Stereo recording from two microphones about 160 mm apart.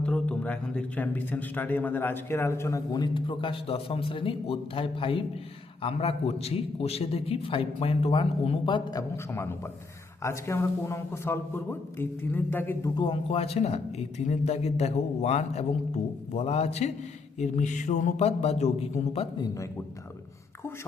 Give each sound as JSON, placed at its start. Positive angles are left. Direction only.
{"t": 0.0, "sound": "a man's voice", "side_deg": 5}
{"t": 9.3, "sound": "a man's voice", "side_deg": 15}
{"t": 13.0, "sound": "a man's voice", "side_deg": 35}